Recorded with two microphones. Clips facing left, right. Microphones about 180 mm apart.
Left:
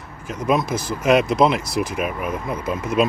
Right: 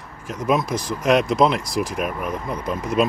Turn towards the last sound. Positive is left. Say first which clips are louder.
# left 1 dB
turn(degrees=0)  # may be behind; listen again after turning